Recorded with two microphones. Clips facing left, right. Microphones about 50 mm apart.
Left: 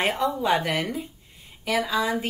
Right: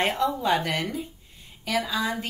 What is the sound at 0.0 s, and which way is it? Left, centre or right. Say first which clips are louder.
Speech: even; centre.